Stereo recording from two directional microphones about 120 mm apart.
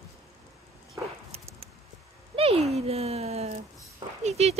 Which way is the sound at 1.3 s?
55° right (ahead or behind).